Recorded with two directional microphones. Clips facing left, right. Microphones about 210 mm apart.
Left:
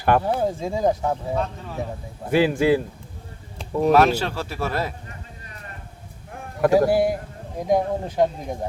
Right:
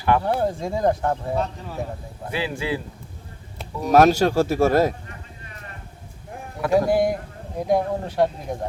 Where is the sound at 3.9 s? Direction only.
45° right (ahead or behind).